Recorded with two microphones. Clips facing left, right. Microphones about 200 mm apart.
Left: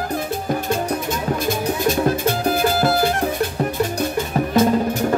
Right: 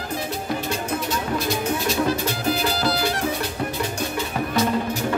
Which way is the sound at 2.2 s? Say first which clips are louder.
Left 5 dB; 50° left (ahead or behind).